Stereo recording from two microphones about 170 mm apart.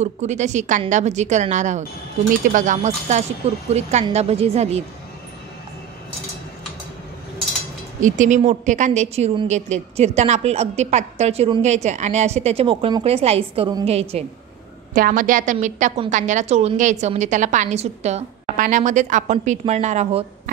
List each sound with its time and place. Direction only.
0.0 s a woman's voice: 40° right (ahead or behind)
8.0 s a woman's voice: 45° right (ahead or behind)
15.0 s a woman's voice: 55° right (ahead or behind)